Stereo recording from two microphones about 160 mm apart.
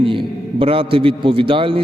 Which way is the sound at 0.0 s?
35° right (ahead or behind).